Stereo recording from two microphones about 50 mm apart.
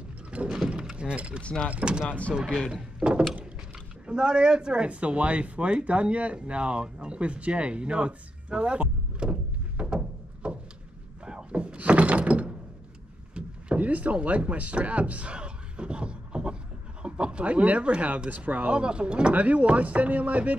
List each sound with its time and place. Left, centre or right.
0.3 s a sound: right
1.4 s speech: centre
1.7 s speech: right
2.0 s speech: left
2.7 s speech: centre
11.2 s door: right
17.0 s speech: right